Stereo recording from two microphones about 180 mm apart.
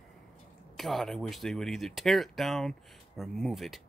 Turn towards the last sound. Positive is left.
turn(degrees=0)  # may be behind; listen again after turning